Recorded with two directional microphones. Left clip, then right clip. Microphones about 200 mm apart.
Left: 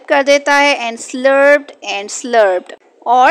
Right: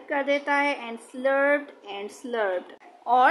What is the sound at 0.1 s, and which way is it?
Speech, 45° left (ahead or behind).